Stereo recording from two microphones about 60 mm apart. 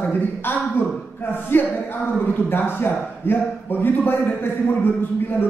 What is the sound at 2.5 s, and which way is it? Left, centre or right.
A man's voice, left.